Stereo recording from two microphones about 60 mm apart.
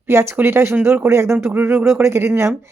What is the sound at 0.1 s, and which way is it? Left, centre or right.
Speech, right.